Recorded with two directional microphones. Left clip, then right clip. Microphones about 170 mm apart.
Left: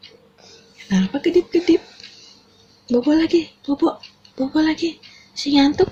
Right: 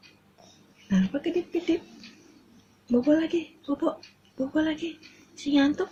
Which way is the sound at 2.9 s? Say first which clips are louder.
Left 7 dB; 45° left (ahead or behind).